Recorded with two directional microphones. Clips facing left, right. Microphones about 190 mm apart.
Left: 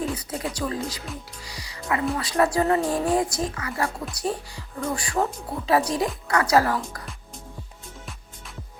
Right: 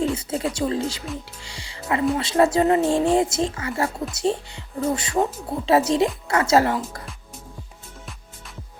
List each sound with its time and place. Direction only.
0.0 s music: 25° right (ahead or behind)
0.5 s speech: 25° right (ahead or behind)